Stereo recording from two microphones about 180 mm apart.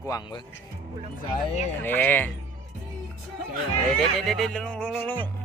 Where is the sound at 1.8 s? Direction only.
10° left (ahead or behind).